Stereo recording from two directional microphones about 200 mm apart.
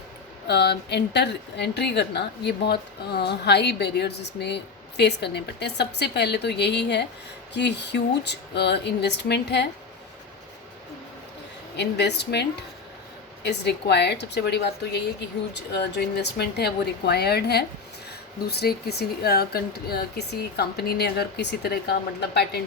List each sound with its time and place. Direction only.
0.4 s a woman's voice: 55° left (ahead or behind)
11.8 s a woman's voice: 55° left (ahead or behind)